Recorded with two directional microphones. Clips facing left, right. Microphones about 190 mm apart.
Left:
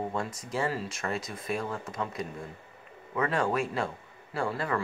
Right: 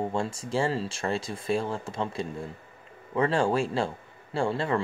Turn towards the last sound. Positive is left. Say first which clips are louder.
# right 4 dB
turn(degrees=-25)  # may be behind; listen again after turning